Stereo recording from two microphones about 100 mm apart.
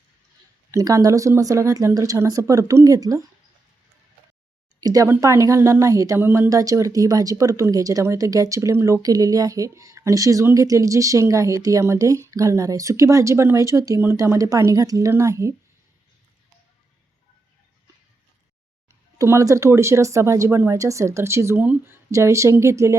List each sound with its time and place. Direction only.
0.7 s speech: 35° right (ahead or behind)
4.8 s speech: 35° right (ahead or behind)
6.1 s speech: 20° right (ahead or behind)
6.5 s speech: 35° right (ahead or behind)
19.2 s speech: 30° right (ahead or behind)